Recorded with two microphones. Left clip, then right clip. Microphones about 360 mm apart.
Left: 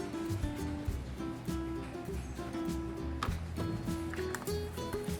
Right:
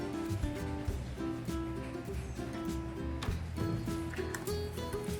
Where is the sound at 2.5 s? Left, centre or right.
Centre.